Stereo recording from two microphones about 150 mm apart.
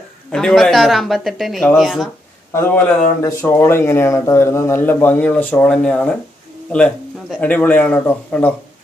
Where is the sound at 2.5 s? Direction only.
15° left (ahead or behind).